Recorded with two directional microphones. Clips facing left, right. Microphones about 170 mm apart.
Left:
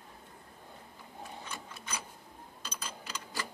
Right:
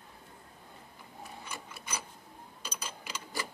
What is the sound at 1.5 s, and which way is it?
Mechanisms, 10° right (ahead or behind).